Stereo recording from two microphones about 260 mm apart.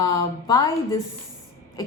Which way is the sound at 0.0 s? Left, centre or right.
Centre.